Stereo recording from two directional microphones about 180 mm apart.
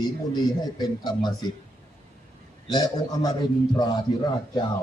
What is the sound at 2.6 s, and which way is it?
Speech, 20° left (ahead or behind).